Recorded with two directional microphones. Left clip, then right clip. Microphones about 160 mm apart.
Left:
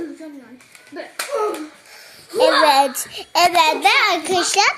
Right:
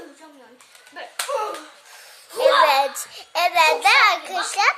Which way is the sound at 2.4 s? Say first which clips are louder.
Left 2 dB; 10° left (ahead or behind).